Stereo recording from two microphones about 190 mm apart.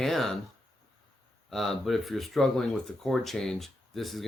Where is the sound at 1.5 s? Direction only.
Centre (ahead or behind).